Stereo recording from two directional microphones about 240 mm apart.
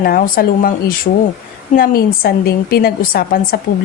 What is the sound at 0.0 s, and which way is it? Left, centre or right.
A woman's voice, left.